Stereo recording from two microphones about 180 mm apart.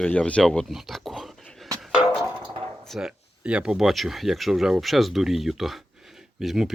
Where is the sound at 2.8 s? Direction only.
Centre (ahead or behind).